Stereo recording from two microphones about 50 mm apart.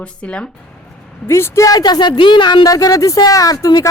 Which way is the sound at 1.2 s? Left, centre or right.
Left.